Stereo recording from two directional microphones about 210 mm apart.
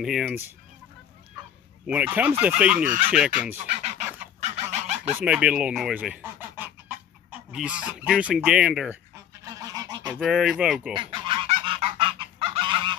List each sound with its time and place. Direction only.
0.0 s speech: centre (ahead or behind)
1.9 s speech: 5° right (ahead or behind)
4.2 s chicken: 30° right (ahead or behind)
5.1 s speech: 5° right (ahead or behind)
9.4 s goose: 15° right (ahead or behind)
10.1 s speech: centre (ahead or behind)
11.0 s goose: 25° right (ahead or behind)